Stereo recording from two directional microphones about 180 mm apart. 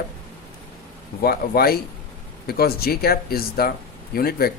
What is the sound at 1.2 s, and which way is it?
Speech, 60° left (ahead or behind).